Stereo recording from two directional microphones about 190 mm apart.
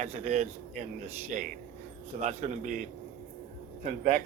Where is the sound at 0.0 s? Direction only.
35° right (ahead or behind).